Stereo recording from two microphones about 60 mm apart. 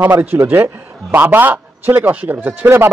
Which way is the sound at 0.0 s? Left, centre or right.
Right.